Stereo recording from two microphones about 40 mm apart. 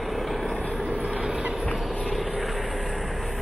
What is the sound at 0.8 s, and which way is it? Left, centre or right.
Vehicle, centre.